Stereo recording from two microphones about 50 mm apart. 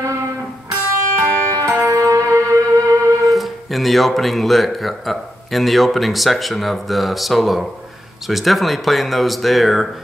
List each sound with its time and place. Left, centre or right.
1.1 s music: right
3.3 s speech: centre